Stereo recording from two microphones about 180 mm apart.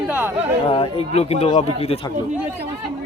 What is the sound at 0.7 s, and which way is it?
Speech, 30° left (ahead or behind).